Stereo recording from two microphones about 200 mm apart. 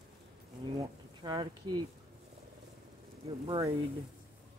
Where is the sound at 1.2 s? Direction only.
20° right (ahead or behind).